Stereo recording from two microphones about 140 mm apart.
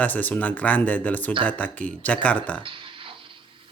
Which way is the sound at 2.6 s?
35° right (ahead or behind).